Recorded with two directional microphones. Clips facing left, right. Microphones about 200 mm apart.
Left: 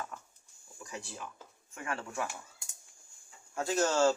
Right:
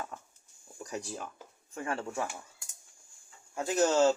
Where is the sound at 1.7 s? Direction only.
30° right (ahead or behind).